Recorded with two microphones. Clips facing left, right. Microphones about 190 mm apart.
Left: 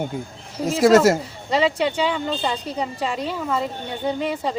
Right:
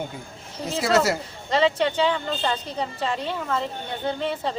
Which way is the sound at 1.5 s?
10° left (ahead or behind).